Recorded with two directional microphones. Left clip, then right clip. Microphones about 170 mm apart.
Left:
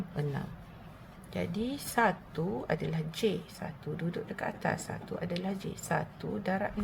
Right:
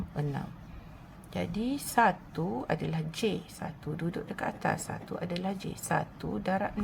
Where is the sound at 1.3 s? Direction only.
20° right (ahead or behind).